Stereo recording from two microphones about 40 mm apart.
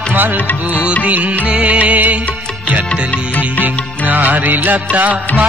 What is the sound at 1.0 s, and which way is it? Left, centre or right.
Music, right.